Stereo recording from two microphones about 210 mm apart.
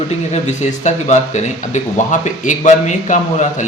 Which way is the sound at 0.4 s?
35° left (ahead or behind).